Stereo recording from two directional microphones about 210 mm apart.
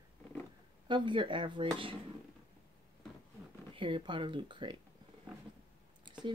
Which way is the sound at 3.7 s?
25° right (ahead or behind).